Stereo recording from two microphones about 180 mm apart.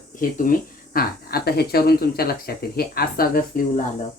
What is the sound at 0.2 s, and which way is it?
Speech, 50° left (ahead or behind).